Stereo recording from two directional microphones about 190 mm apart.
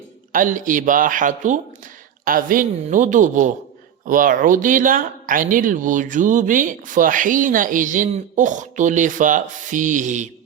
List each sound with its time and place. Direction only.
0.3 s speech: 45° right (ahead or behind)